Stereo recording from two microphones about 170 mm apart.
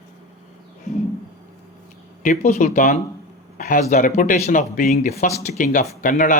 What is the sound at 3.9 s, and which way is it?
Speech, 50° left (ahead or behind).